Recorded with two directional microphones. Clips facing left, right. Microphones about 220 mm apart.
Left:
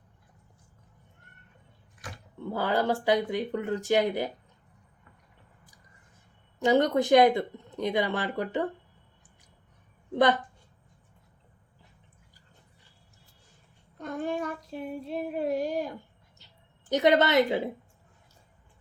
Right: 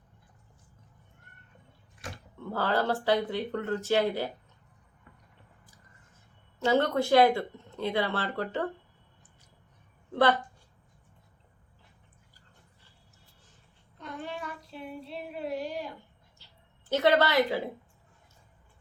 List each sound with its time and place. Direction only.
2.4 s speech: 15° left (ahead or behind)
6.6 s speech: 15° left (ahead or behind)
10.1 s a woman's voice: 15° left (ahead or behind)
14.0 s child singing: 45° left (ahead or behind)
16.4 s a sound: 20° left (ahead or behind)
16.9 s a woman's voice: 20° left (ahead or behind)